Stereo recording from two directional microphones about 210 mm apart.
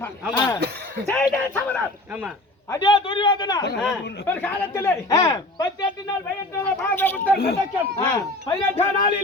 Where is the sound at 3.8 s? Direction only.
10° left (ahead or behind).